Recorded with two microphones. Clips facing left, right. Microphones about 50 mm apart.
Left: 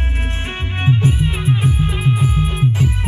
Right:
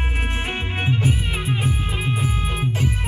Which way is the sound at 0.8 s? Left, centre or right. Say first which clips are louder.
Left 6 dB; centre.